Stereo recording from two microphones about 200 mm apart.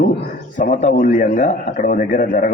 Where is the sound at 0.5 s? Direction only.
40° left (ahead or behind).